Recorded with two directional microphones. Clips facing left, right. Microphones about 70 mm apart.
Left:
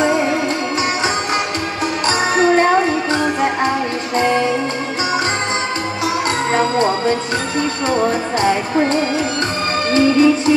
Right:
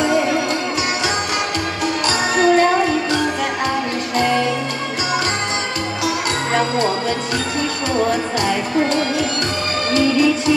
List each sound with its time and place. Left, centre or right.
2.0 s music: left